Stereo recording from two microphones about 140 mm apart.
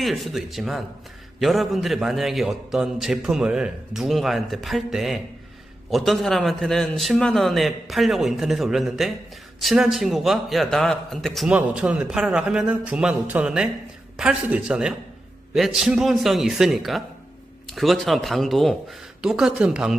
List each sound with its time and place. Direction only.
0.0 s a man's voice: centre (ahead or behind)